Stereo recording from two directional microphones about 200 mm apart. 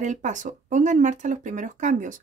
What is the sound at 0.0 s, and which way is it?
Speech, 40° right (ahead or behind).